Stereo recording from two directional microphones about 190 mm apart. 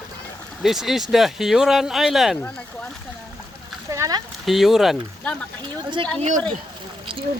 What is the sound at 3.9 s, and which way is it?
Speech, 15° right (ahead or behind).